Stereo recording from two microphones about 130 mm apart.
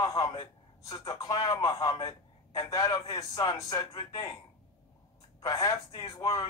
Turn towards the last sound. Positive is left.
turn(degrees=25)  # may be behind; listen again after turning